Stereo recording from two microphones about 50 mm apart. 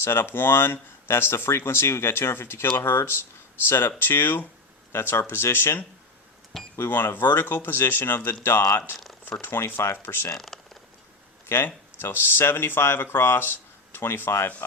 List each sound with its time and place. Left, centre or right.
0.0 s speech: left
10.3 s speech: centre
11.4 s speech: left